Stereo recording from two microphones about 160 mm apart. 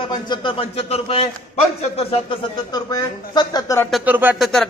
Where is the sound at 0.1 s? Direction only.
30° left (ahead or behind).